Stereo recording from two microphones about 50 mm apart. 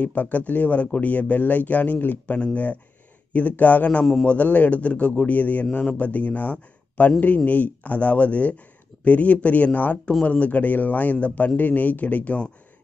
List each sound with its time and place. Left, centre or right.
0.0 s a man's voice: left